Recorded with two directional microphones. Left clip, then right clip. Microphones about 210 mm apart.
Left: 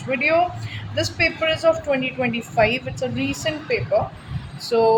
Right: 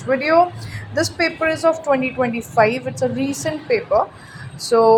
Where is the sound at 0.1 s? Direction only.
25° right (ahead or behind).